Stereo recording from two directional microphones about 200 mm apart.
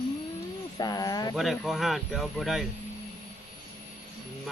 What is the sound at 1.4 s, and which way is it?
Speech, centre (ahead or behind).